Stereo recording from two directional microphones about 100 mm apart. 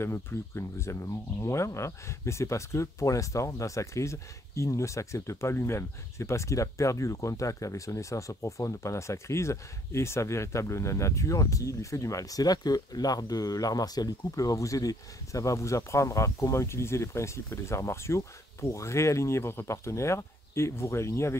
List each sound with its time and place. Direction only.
0.0 s speech: 25° left (ahead or behind)